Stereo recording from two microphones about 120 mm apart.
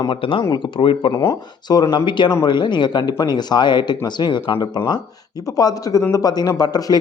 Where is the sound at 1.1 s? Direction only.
25° left (ahead or behind).